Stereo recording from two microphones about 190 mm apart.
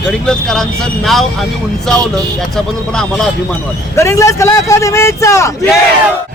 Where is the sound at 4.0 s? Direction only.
15° left (ahead or behind).